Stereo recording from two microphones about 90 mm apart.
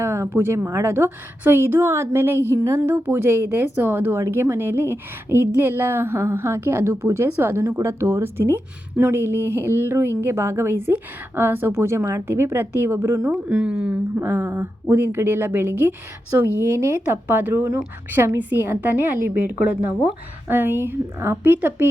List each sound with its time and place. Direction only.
0.0 s a woman's voice: 30° right (ahead or behind)
13.2 s a woman's voice: 10° right (ahead or behind)
14.2 s a woman's voice: 30° right (ahead or behind)